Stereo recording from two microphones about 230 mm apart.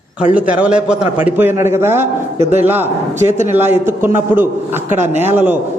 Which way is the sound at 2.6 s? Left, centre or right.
Centre.